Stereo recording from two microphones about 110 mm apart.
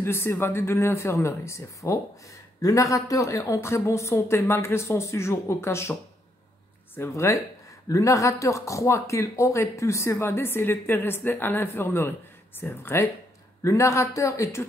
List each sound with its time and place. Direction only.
0.0 s speech: 20° left (ahead or behind)
7.0 s speech: 25° left (ahead or behind)